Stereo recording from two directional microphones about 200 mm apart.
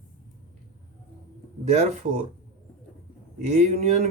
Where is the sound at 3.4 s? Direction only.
35° right (ahead or behind).